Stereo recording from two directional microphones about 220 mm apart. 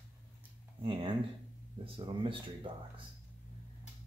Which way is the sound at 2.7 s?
25° right (ahead or behind).